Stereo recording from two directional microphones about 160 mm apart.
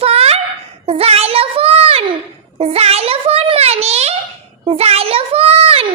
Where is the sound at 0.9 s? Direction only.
40° right (ahead or behind).